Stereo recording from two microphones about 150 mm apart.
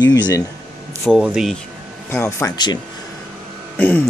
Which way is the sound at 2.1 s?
15° left (ahead or behind).